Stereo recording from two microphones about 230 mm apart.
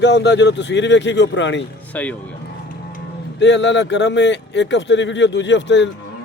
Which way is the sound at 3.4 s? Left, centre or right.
Left.